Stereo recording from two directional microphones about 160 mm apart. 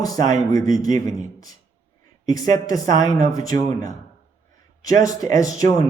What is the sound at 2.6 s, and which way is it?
Speech, 20° left (ahead or behind).